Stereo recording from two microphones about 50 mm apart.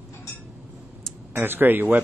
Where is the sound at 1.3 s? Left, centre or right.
Right.